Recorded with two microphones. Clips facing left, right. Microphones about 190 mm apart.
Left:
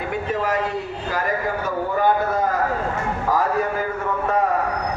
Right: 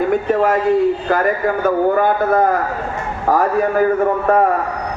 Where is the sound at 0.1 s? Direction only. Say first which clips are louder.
Right 8 dB; 50° right (ahead or behind).